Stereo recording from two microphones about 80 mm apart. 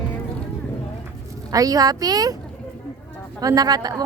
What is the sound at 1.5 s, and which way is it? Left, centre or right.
Speech, right.